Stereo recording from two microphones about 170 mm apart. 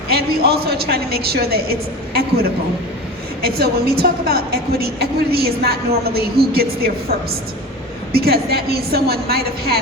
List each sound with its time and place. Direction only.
0.1 s a woman's voice: 65° right (ahead or behind)
3.4 s a woman's voice: 65° right (ahead or behind)
8.1 s a woman's voice: 65° right (ahead or behind)